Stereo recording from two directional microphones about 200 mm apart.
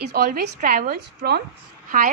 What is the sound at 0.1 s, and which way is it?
A woman's voice, 50° right (ahead or behind).